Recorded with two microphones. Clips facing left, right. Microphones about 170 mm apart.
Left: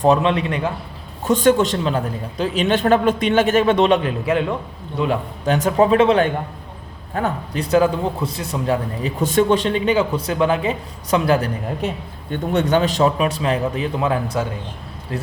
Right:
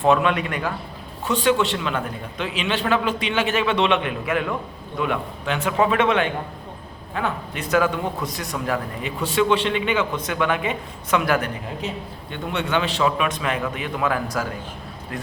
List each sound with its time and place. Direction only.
0.0 s a man's voice: 30° left (ahead or behind)
1.2 s a man's voice: 45° left (ahead or behind)
12.3 s a man's voice: 45° left (ahead or behind); by 15.3 s 25° left (ahead or behind)